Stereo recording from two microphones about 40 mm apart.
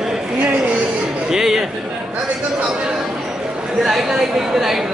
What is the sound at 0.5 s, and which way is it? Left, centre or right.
Speech, right.